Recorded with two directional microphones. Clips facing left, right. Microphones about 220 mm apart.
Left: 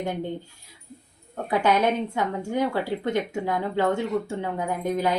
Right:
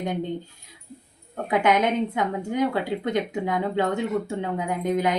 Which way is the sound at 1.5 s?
20° right (ahead or behind).